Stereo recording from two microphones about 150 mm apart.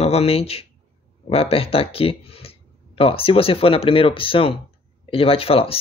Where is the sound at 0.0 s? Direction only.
40° left (ahead or behind).